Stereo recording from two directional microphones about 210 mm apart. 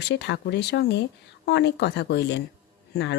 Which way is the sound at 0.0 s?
55° left (ahead or behind).